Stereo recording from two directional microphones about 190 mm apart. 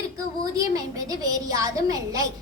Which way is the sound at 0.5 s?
20° right (ahead or behind).